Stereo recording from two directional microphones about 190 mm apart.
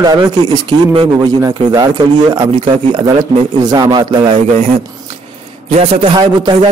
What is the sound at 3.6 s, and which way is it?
Speech, 20° right (ahead or behind).